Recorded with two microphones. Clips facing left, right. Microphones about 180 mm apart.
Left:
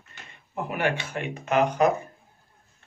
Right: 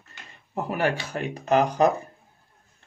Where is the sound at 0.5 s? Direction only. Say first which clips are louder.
Right 2 dB; 40° right (ahead or behind).